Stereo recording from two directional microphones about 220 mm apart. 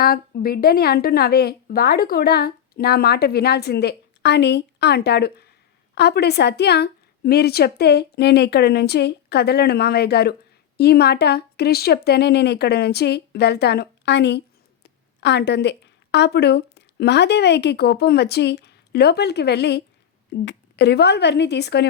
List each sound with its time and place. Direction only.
0.0 s a woman's voice: 45° left (ahead or behind)